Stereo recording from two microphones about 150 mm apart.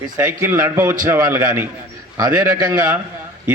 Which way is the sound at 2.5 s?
25° right (ahead or behind).